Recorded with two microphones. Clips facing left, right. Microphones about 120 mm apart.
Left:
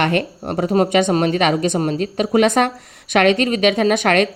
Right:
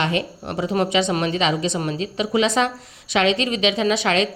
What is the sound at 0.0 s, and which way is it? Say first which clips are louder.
Speech: left 4 dB; 60° left (ahead or behind).